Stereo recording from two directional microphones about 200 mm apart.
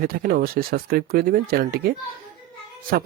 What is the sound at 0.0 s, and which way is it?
Speech, 50° right (ahead or behind).